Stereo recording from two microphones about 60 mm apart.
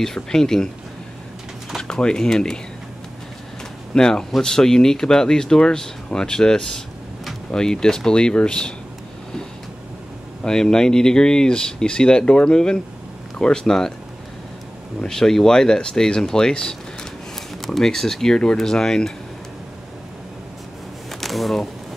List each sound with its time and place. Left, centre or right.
0.0 s speech: centre
1.8 s speech: centre
3.9 s speech: centre
10.4 s speech: centre
15.0 s speech: centre
21.1 s a sound: centre